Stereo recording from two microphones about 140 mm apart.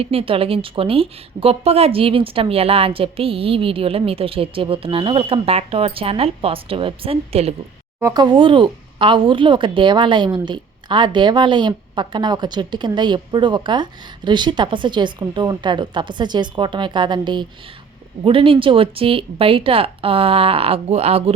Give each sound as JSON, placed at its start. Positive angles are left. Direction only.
{"t": 0.0, "sound": "speech", "side_deg": -45}
{"t": 8.1, "sound": "speech", "side_deg": -30}